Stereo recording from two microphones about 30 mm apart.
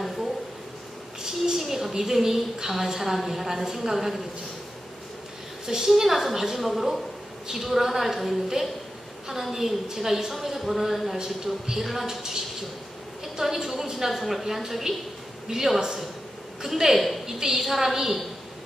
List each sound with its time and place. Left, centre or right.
1.2 s a sound: right
1.6 s a woman's voice: centre
5.9 s a woman's voice: centre
11.1 s a man's voice: centre
11.8 s speech: centre
12.1 s a woman's voice: centre
14.1 s speech: centre
14.4 s a woman's voice: centre